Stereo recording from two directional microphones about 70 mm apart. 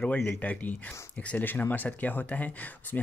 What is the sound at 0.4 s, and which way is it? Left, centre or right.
Speech, left.